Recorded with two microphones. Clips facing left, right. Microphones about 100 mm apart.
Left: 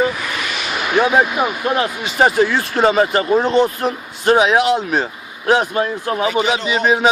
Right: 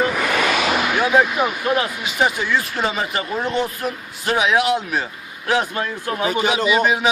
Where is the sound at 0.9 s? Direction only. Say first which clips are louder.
Left 5 dB; 25° left (ahead or behind).